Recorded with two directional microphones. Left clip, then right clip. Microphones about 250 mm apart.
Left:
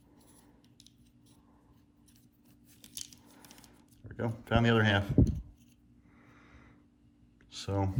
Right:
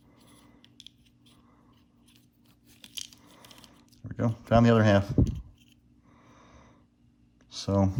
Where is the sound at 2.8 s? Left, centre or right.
Centre.